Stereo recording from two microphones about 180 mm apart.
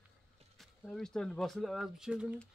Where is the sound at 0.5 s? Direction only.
Centre (ahead or behind).